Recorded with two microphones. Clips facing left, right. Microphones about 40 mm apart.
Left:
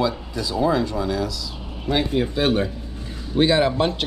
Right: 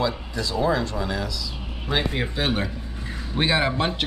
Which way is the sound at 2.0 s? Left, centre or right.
Right.